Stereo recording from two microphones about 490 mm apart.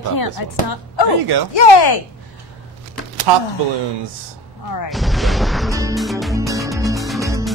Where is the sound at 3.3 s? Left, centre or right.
Right.